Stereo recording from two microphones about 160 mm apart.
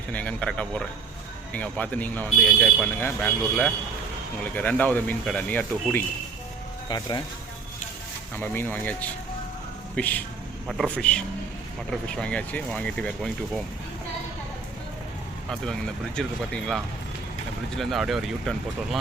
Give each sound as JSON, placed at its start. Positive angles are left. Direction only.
{"t": 0.1, "sound": "speech", "side_deg": 10}
{"t": 6.8, "sound": "speech", "side_deg": 25}
{"t": 8.4, "sound": "speech", "side_deg": 15}
{"t": 15.4, "sound": "speech", "side_deg": 5}